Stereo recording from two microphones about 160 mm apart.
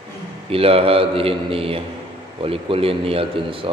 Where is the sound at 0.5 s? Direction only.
35° right (ahead or behind).